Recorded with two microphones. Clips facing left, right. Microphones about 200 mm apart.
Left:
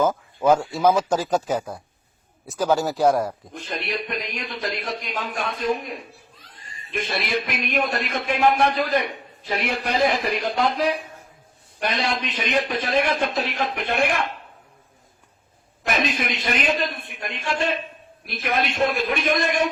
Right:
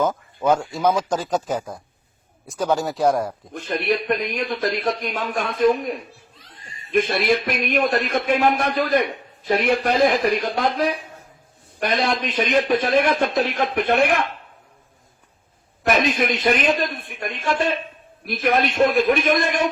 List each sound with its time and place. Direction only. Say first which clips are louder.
0.4 s speech: left 1 dB; 5° left (ahead or behind)
3.5 s a man's voice: right 7 dB; 55° right (ahead or behind)
6.9 s a man's voice: right 7 dB; 50° right (ahead or behind)
11.8 s a man's voice: right 3 dB; 50° right (ahead or behind)
15.9 s a man's voice: right 5 dB; 50° right (ahead or behind)